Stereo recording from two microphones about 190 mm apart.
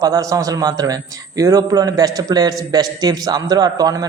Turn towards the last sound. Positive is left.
turn(degrees=-20)  # may be behind; listen again after turning